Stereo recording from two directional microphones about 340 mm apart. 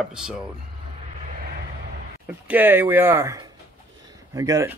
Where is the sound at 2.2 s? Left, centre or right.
Centre.